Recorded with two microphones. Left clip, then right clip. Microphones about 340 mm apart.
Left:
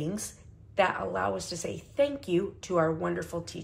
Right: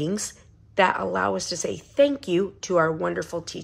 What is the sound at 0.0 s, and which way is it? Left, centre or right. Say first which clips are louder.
Speech: right 7 dB; right.